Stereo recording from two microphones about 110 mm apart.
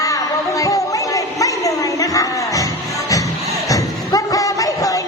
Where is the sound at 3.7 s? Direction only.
30° left (ahead or behind).